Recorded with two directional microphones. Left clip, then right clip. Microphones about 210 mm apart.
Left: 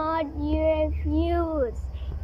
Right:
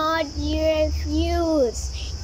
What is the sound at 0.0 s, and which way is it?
Child singing, 5° left (ahead or behind).